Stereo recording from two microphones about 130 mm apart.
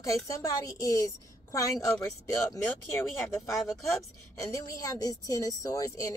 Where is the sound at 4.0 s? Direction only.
25° left (ahead or behind).